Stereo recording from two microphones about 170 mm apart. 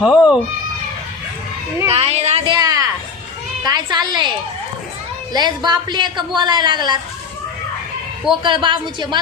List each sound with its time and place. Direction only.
0.0 s speech: 5° right (ahead or behind)
1.9 s a sound: 35° right (ahead or behind)
2.6 s a sound: 20° right (ahead or behind)
3.6 s a woman's voice: 25° right (ahead or behind)
5.3 s speech: 25° right (ahead or behind)
8.3 s speech: 30° right (ahead or behind)